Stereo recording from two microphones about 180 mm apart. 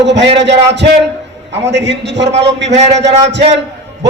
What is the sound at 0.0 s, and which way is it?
A man's voice, 75° right (ahead or behind).